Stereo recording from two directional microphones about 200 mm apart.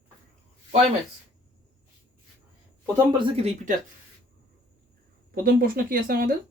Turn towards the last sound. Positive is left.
turn(degrees=-45)  # may be behind; listen again after turning